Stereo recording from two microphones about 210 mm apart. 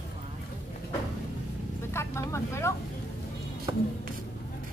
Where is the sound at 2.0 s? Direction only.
15° left (ahead or behind).